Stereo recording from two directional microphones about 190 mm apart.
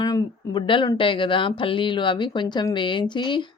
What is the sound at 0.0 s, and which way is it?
Speech, 25° left (ahead or behind).